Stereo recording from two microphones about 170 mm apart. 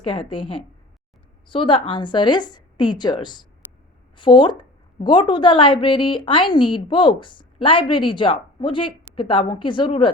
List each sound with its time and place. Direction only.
0.0 s a woman's voice: 30° left (ahead or behind)